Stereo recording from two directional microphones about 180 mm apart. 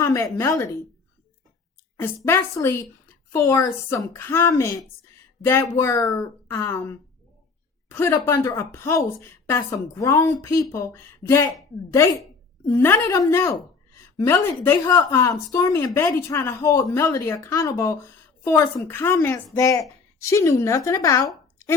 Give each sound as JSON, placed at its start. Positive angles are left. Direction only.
{"t": 0.0, "sound": "a woman's voice", "side_deg": 15}
{"t": 2.0, "sound": "a woman's voice", "side_deg": 15}